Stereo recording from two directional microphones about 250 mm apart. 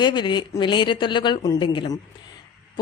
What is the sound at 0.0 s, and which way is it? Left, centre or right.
A woman's voice, centre.